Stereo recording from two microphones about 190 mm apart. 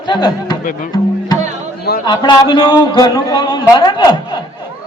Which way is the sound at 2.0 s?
25° left (ahead or behind).